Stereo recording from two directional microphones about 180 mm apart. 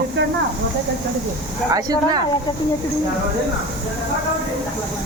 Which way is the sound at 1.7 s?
20° right (ahead or behind).